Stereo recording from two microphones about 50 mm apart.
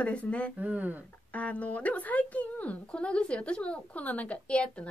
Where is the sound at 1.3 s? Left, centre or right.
Left.